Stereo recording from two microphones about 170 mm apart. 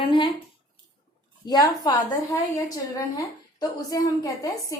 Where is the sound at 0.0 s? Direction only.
30° left (ahead or behind).